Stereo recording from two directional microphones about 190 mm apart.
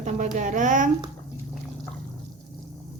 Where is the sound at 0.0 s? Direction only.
40° right (ahead or behind).